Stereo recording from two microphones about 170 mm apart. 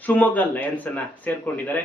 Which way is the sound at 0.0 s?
10° left (ahead or behind).